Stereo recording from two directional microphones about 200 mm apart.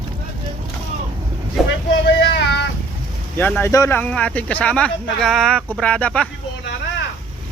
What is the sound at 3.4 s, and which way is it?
Speech, 10° left (ahead or behind).